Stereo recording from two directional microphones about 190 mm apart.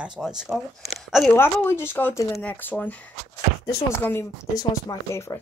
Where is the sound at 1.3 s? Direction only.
10° left (ahead or behind).